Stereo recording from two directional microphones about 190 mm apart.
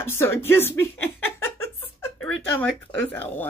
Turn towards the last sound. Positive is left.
turn(degrees=10)  # may be behind; listen again after turning